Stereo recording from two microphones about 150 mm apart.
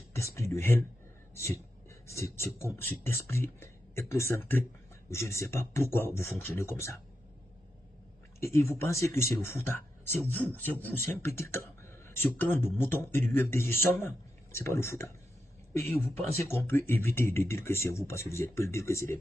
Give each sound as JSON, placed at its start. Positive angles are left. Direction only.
{"t": 0.1, "sound": "speech", "side_deg": 20}
{"t": 1.9, "sound": "speech", "side_deg": 20}
{"t": 8.4, "sound": "speech", "side_deg": 20}